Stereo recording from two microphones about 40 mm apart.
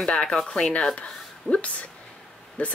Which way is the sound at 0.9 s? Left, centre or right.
Left.